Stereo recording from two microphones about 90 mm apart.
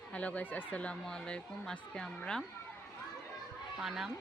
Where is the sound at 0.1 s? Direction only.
15° left (ahead or behind).